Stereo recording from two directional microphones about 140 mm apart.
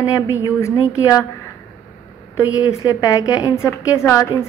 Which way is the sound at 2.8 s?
25° left (ahead or behind).